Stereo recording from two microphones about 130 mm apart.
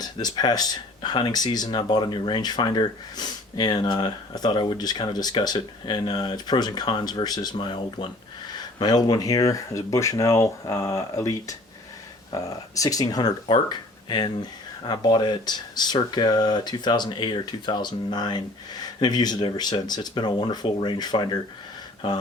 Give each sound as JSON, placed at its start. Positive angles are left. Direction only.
{"t": 0.0, "sound": "speech", "side_deg": 30}